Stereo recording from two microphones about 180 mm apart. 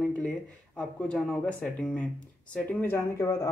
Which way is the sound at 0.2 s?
5° left (ahead or behind).